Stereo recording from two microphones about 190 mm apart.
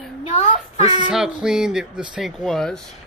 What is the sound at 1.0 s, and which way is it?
Speech, 5° right (ahead or behind).